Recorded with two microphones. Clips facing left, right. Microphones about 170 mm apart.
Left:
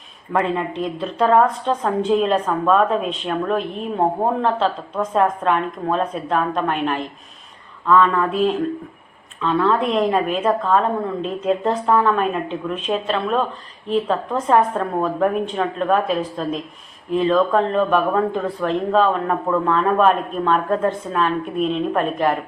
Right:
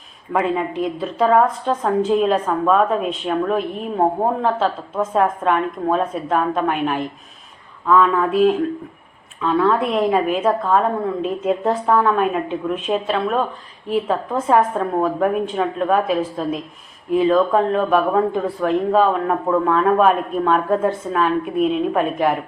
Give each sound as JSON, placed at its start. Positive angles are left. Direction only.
{"t": 0.3, "sound": "a woman's voice", "side_deg": -5}